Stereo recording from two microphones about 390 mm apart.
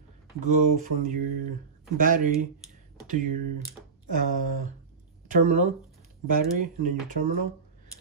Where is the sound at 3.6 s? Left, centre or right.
Centre.